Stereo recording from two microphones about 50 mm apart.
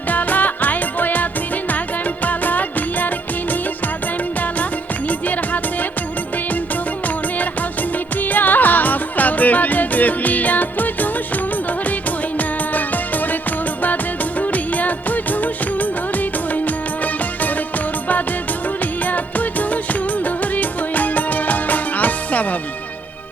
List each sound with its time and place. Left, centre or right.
0.1 s music: left
8.2 s music: left
13.8 s music of bollywood: left
19.0 s music: left